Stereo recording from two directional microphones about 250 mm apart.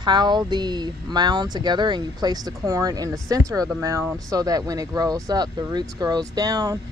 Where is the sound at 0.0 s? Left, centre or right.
Centre.